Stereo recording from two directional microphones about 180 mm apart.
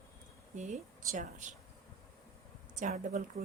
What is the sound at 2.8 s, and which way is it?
Speech, 45° right (ahead or behind).